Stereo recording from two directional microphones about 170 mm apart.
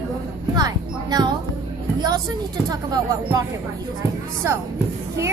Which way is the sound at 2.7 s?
20° right (ahead or behind).